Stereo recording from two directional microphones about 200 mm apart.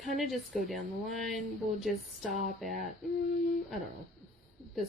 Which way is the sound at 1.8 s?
Centre (ahead or behind).